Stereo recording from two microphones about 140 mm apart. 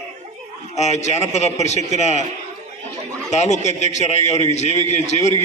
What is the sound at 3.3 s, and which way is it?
A man's voice, 55° left (ahead or behind).